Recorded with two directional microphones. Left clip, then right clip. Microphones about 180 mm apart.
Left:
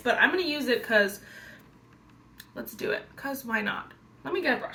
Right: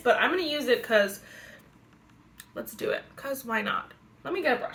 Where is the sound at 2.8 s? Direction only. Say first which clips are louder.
Even; 20° right (ahead or behind).